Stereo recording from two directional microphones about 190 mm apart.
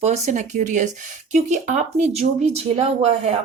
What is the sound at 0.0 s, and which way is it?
Speech, 35° right (ahead or behind).